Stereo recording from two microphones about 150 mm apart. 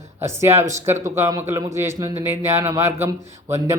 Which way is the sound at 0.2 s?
15° right (ahead or behind).